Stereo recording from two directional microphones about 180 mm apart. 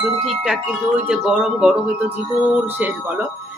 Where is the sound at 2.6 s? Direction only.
10° right (ahead or behind).